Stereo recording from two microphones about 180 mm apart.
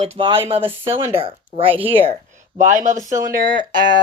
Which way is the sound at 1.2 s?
30° right (ahead or behind).